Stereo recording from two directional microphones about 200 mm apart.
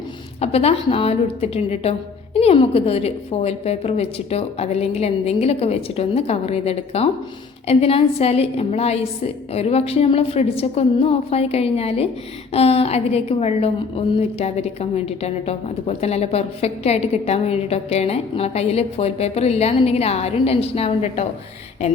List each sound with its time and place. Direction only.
0.4 s a woman's voice: 30° left (ahead or behind)